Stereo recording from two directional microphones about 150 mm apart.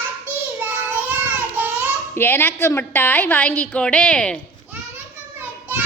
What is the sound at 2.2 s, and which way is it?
A woman's voice, 15° left (ahead or behind).